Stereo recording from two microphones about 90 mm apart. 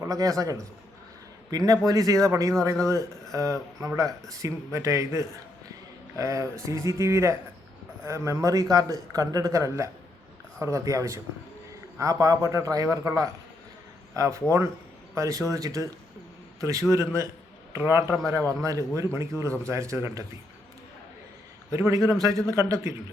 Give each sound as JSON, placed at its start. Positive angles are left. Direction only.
{"t": 0.0, "sound": "a man's voice", "side_deg": -40}
{"t": 14.1, "sound": "a man's voice", "side_deg": -35}
{"t": 18.3, "sound": "speech", "side_deg": -40}
{"t": 21.7, "sound": "speech", "side_deg": -35}
{"t": 22.7, "sound": "speech", "side_deg": -30}